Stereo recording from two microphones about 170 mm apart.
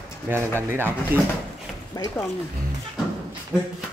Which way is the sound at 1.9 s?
20° left (ahead or behind).